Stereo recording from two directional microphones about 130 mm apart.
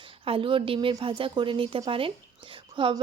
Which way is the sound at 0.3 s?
40° right (ahead or behind).